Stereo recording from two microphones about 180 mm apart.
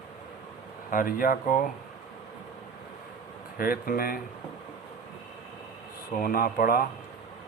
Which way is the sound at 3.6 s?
50° left (ahead or behind).